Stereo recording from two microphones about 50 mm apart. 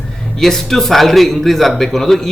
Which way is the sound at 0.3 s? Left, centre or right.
Centre.